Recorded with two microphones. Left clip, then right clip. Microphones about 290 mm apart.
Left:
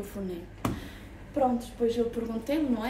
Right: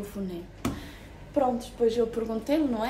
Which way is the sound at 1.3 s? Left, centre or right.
Centre.